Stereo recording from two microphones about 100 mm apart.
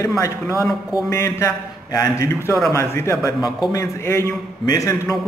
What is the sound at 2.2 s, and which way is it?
A man's voice, 25° left (ahead or behind).